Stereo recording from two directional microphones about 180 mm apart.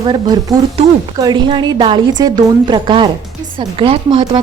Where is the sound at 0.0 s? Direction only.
25° right (ahead or behind).